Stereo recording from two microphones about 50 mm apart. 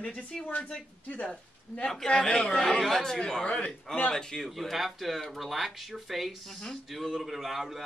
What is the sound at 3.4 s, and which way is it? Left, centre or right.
Speech, left.